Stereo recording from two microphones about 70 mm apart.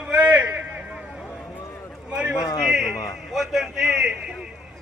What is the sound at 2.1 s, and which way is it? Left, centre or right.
Run, centre.